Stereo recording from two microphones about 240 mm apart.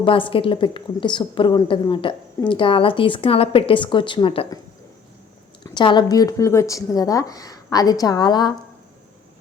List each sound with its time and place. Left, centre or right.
0.0 s a woman's voice: left
5.6 s speech: centre